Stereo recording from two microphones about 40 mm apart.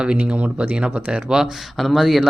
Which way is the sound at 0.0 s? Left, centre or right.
Right.